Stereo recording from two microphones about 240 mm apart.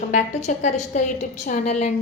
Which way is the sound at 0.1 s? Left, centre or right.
Left.